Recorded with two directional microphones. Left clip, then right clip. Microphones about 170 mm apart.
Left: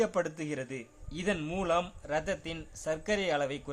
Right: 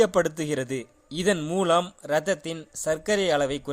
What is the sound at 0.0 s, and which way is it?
A man's voice, 40° right (ahead or behind).